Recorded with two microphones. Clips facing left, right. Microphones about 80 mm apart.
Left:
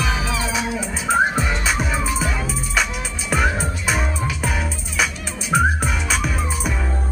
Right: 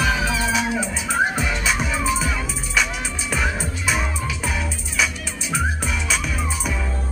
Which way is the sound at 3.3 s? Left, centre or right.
Left.